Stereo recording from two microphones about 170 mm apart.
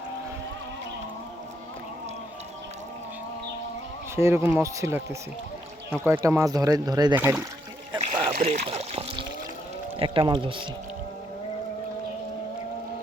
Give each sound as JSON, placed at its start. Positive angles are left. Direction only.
{"t": 4.1, "sound": "speech", "side_deg": -15}
{"t": 8.2, "sound": "trickle", "side_deg": -35}
{"t": 10.0, "sound": "speech", "side_deg": -30}